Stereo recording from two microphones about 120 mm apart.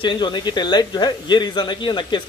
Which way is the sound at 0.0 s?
40° left (ahead or behind).